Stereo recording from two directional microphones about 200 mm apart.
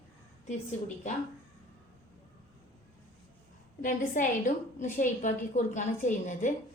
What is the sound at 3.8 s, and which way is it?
A woman's voice, 40° left (ahead or behind).